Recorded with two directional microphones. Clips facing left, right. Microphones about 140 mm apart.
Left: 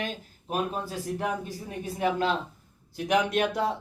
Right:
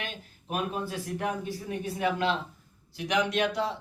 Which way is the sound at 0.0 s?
35° left (ahead or behind).